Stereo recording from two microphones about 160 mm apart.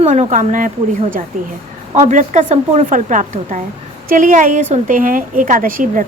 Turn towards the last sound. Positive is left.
turn(degrees=-60)  # may be behind; listen again after turning